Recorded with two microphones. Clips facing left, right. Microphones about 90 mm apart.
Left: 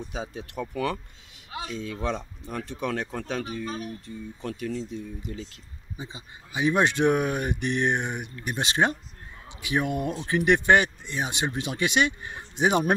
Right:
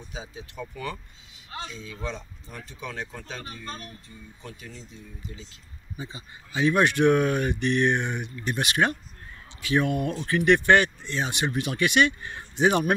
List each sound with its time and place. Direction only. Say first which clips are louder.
0.0 s speech: left 5 dB; 60° left (ahead or behind)
3.6 s speech: left 5 dB; 5° left (ahead or behind)
4.4 s speech: left 12 dB; 65° left (ahead or behind)
5.9 s speech: right 1 dB; 20° left (ahead or behind)